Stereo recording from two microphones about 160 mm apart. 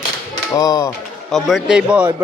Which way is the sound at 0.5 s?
20° left (ahead or behind).